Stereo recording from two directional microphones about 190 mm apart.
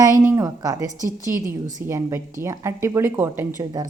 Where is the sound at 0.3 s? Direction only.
15° right (ahead or behind).